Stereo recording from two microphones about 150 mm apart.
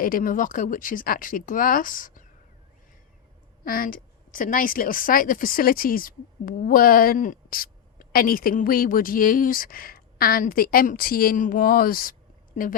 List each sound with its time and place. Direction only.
0.0 s a woman's voice: 70° left (ahead or behind)
3.6 s a woman's voice: 70° left (ahead or behind)